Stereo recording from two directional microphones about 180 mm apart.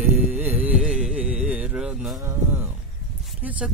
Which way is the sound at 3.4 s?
10° right (ahead or behind).